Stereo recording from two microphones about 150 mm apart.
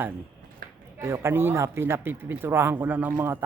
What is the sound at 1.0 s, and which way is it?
Speech, 15° right (ahead or behind).